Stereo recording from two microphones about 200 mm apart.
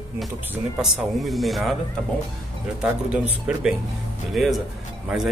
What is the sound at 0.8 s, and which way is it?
Speech, centre (ahead or behind).